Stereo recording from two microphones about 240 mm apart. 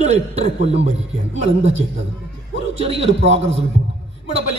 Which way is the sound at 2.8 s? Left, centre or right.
Right.